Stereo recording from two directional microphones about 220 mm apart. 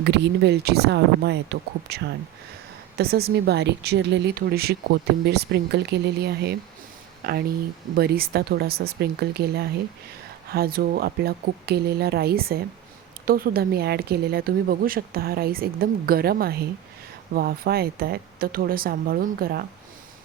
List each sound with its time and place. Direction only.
0.0 s speech: 50° right (ahead or behind)